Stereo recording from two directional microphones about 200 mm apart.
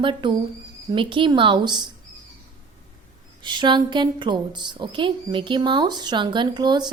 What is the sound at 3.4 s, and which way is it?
A woman's voice, 20° right (ahead or behind).